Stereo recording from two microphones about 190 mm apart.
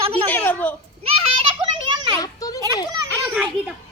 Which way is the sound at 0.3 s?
10° left (ahead or behind).